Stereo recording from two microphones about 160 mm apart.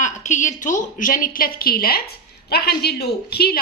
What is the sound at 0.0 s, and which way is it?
A woman's voice, 50° left (ahead or behind).